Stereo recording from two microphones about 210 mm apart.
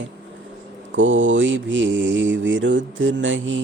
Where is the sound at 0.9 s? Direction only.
65° right (ahead or behind).